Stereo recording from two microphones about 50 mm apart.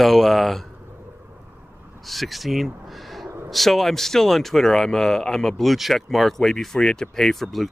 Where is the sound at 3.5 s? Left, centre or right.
Centre.